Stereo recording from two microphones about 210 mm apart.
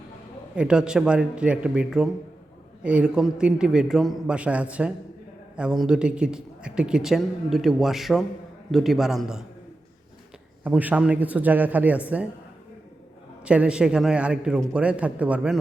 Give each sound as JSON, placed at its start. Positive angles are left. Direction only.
{"t": 0.5, "sound": "speech", "side_deg": -5}
{"t": 10.6, "sound": "speech", "side_deg": -10}
{"t": 13.4, "sound": "speech", "side_deg": -5}